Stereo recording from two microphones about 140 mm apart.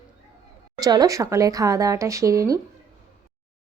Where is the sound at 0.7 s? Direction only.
25° right (ahead or behind).